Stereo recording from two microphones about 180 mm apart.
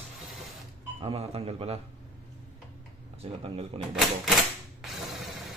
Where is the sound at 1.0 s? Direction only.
35° right (ahead or behind).